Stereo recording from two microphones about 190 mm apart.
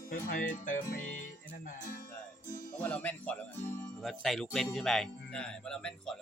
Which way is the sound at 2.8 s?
10° left (ahead or behind).